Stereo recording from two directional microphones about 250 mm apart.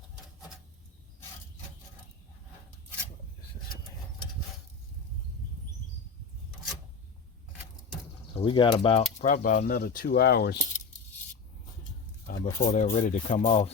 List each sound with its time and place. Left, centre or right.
8.4 s speech: centre
9.2 s speech: left
12.3 s speech: left